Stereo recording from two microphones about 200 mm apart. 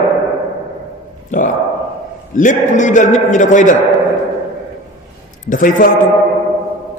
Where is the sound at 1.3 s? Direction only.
40° left (ahead or behind).